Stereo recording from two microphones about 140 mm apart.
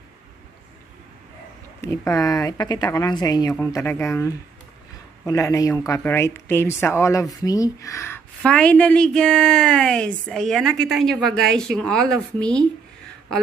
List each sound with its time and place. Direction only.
1.8 s speech: 25° left (ahead or behind)
8.5 s a woman's voice: 10° left (ahead or behind)